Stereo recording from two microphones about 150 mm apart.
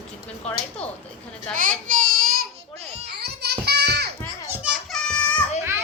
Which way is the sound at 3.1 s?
90° right.